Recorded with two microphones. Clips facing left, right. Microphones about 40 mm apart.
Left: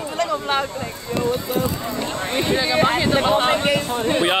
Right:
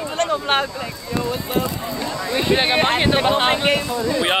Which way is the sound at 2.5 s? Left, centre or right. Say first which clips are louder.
Right 1 dB; right.